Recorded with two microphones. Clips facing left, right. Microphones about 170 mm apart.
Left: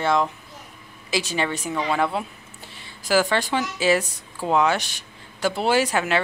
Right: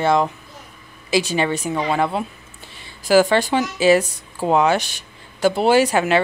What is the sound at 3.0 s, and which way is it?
Speech, 25° right (ahead or behind).